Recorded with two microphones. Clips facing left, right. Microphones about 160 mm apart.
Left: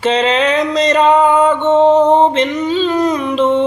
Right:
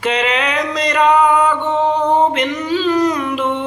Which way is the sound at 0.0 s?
30° left (ahead or behind).